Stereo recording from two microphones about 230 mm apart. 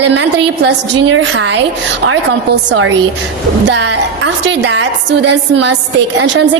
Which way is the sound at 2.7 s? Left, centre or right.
Right.